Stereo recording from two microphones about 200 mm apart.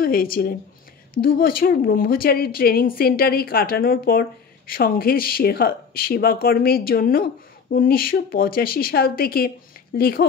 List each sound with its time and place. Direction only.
0.0 s speech: 45° left (ahead or behind)